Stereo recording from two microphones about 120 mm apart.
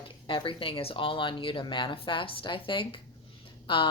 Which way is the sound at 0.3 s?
45° left (ahead or behind).